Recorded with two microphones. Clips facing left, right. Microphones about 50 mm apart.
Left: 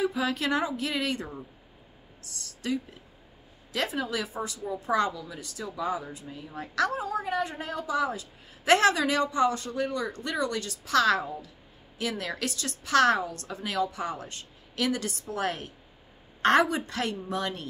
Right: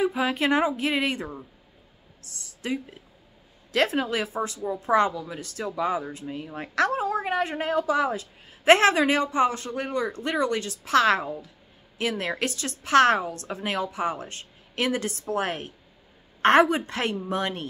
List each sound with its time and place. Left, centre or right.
0.0 s a woman's voice: right
2.4 s speech: right
3.7 s a woman's voice: right
5.3 s a woman's voice: right
8.6 s a woman's voice: right